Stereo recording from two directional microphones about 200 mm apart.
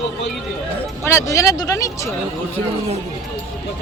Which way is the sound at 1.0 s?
15° left (ahead or behind).